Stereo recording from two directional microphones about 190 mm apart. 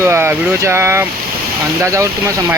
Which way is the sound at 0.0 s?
15° right (ahead or behind).